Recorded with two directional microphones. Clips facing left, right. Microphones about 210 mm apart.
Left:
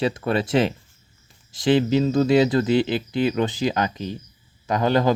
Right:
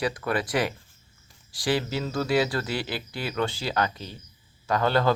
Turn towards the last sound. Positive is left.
turn(degrees=15)  # may be behind; listen again after turning